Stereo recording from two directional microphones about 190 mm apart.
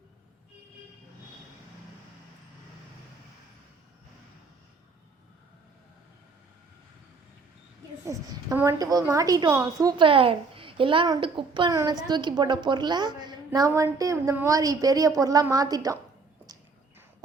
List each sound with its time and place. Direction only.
8.0 s a woman's voice: 15° right (ahead or behind)